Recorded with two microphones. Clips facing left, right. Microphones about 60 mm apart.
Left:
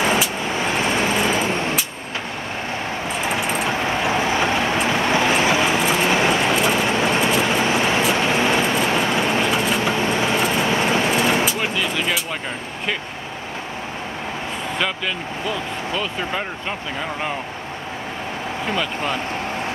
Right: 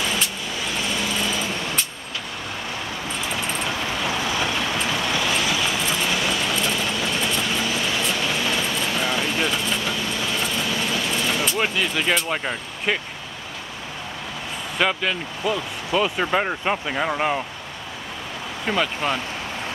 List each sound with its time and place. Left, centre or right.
0.5 s vehicle: left
3.6 s vehicle: left
12.3 s vehicle: centre
14.8 s speech: centre